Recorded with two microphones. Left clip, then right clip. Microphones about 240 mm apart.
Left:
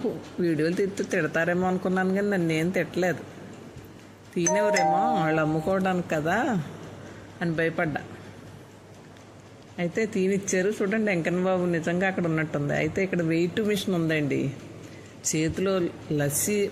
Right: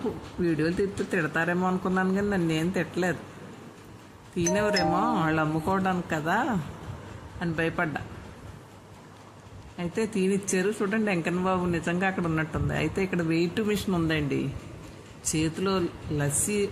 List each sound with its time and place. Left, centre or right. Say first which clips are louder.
0.4 s speech: left 1 dB; centre
4.4 s speech: left 3 dB; centre
9.7 s speech: left 2 dB; centre